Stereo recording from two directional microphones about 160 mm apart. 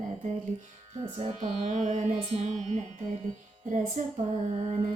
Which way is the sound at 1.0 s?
35° right (ahead or behind).